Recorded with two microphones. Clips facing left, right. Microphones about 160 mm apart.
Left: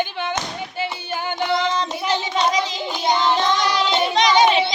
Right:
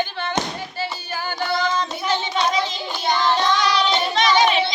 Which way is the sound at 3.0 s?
20° left (ahead or behind).